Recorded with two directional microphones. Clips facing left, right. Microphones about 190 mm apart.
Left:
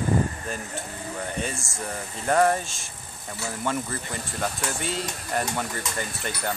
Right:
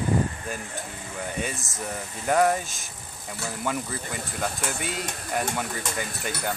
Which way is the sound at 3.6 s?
5° right (ahead or behind).